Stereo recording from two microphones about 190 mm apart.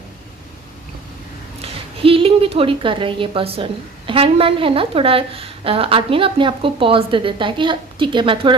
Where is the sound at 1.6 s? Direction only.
30° right (ahead or behind).